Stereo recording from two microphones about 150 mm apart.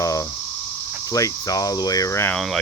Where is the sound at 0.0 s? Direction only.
20° left (ahead or behind).